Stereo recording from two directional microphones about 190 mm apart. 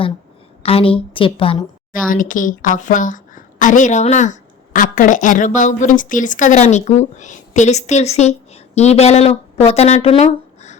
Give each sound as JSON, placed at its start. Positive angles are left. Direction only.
{"t": 0.6, "sound": "a woman's voice", "side_deg": 30}
{"t": 1.9, "sound": "a woman's voice", "side_deg": 45}